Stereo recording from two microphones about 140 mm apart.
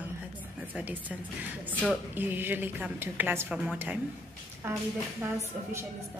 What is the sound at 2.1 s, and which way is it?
A woman's voice, 15° right (ahead or behind).